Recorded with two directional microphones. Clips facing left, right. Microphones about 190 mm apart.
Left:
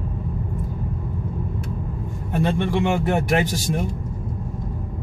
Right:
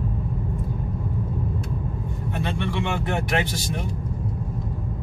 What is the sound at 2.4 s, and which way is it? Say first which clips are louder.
Speech: left 6 dB; 45° left (ahead or behind).